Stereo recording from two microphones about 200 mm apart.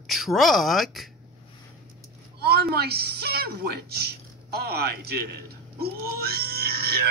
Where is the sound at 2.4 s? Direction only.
50° right (ahead or behind).